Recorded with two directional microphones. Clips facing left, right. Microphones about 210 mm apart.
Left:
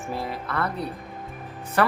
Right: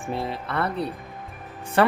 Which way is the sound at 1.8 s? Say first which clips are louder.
Right 3 dB; 25° right (ahead or behind).